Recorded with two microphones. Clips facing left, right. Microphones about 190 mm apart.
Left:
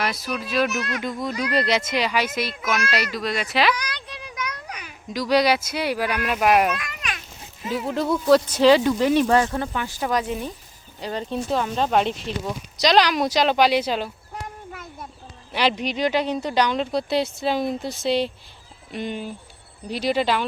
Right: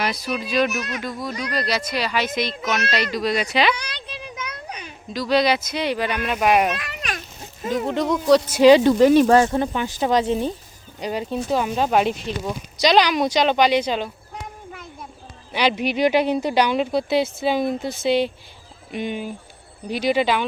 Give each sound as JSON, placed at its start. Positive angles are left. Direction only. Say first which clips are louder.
{"t": 0.0, "sound": "speech", "louder": "right 2 dB", "side_deg": 0}
{"t": 0.7, "sound": "a woman's voice", "louder": "left 1 dB", "side_deg": -15}
{"t": 1.5, "sound": "speech", "louder": "left 2 dB", "side_deg": 25}
{"t": 3.8, "sound": "a sound", "louder": "even", "side_deg": -25}
{"t": 5.1, "sound": "speech", "louder": "even", "side_deg": 15}
{"t": 6.7, "sound": "a sound", "louder": "right 2 dB", "side_deg": -35}
{"t": 7.9, "sound": "speech", "louder": "even", "side_deg": 5}
{"t": 8.4, "sound": "a woman's voice", "louder": "right 4 dB", "side_deg": -15}
{"t": 8.8, "sound": "speech", "louder": "right 5 dB", "side_deg": -40}
{"t": 9.4, "sound": "speech", "louder": "right 4 dB", "side_deg": -20}
{"t": 11.0, "sound": "a woman's voice", "louder": "right 2 dB", "side_deg": -10}